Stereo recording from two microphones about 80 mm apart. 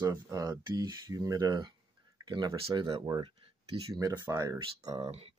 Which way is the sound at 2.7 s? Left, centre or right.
Right.